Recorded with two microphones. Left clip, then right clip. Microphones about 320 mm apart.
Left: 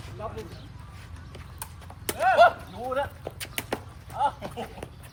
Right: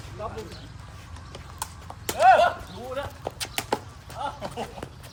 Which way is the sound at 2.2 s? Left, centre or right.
Centre.